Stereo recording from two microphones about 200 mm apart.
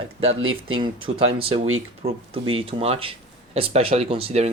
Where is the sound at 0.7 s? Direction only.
25° right (ahead or behind).